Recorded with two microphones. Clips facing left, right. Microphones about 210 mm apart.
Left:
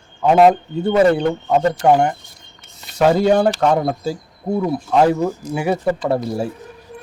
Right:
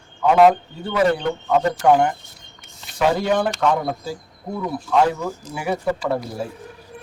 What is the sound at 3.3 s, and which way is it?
Speech, 40° left (ahead or behind).